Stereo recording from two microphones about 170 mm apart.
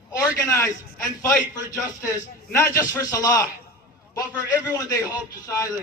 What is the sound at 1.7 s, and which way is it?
A man's voice, 15° left (ahead or behind).